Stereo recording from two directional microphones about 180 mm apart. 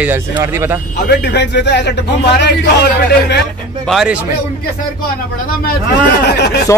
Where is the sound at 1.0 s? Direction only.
70° left (ahead or behind).